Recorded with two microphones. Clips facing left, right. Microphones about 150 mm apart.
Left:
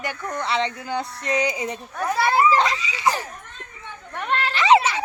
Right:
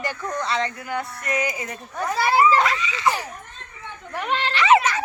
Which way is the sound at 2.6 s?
20° left (ahead or behind).